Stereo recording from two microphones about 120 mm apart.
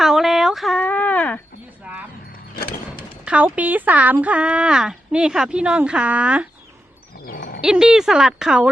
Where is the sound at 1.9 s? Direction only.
10° right (ahead or behind).